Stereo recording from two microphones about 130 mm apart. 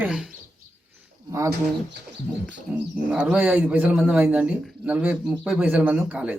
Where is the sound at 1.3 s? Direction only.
25° right (ahead or behind).